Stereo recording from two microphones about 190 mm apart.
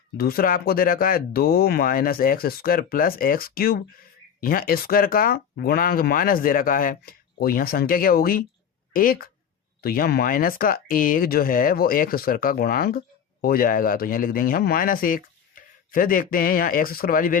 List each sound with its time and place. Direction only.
0.2 s speech: 55° left (ahead or behind)